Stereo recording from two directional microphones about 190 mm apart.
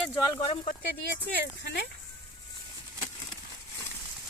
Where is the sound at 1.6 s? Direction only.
65° left (ahead or behind).